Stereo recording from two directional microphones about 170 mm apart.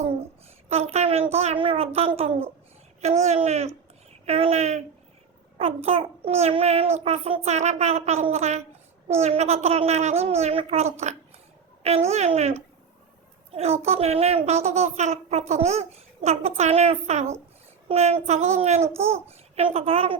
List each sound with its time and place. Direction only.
0.7 s a child's voice: 40° right (ahead or behind)